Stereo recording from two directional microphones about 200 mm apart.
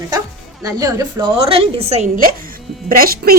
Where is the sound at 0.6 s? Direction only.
15° right (ahead or behind).